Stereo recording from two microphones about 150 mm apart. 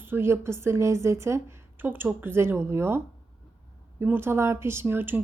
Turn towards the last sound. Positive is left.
turn(degrees=-15)  # may be behind; listen again after turning